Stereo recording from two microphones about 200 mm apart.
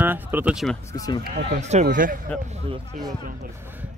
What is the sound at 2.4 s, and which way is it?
Speech, 30° right (ahead or behind).